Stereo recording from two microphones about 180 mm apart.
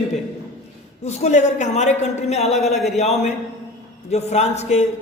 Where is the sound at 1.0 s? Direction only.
40° left (ahead or behind).